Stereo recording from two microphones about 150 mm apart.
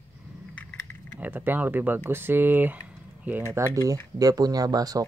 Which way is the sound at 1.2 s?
15° right (ahead or behind).